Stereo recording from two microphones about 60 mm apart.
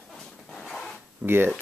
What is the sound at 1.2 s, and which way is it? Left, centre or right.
Speech, right.